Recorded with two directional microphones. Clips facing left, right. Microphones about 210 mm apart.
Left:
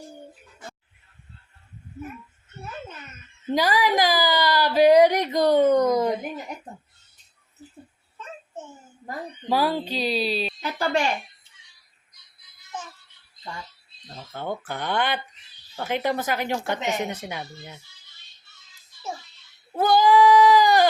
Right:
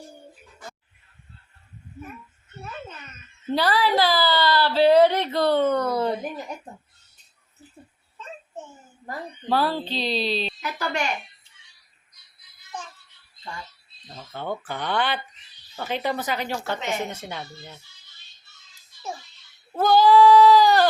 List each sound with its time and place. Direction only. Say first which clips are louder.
3.5 s speech: even; 15° left (ahead or behind)
9.0 s a woman's voice: even; 10° left (ahead or behind)
10.6 s a sound: left 4 dB; 30° left (ahead or behind)
14.2 s speech: even; 10° left (ahead or behind)
19.7 s sheep: right 1 dB; 15° left (ahead or behind)